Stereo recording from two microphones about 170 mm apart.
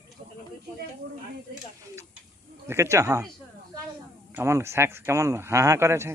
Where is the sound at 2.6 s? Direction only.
15° right (ahead or behind).